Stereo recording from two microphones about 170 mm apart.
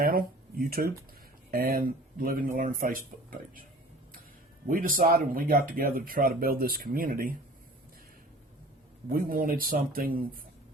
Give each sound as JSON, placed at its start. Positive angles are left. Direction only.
{"t": 0.0, "sound": "speech", "side_deg": -60}
{"t": 4.7, "sound": "speech", "side_deg": -55}
{"t": 9.1, "sound": "speech", "side_deg": -55}